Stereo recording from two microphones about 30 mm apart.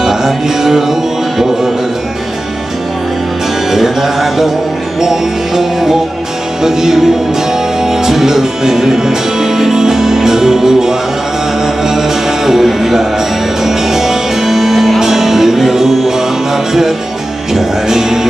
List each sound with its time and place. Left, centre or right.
0.0 s music: centre
3.7 s music: centre
12.4 s music: centre
17.8 s music: centre